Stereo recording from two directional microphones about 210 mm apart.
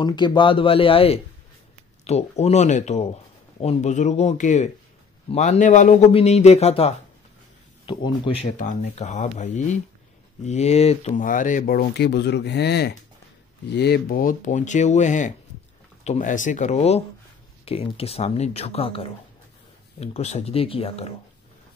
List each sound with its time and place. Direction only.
0.0 s speech: 20° left (ahead or behind)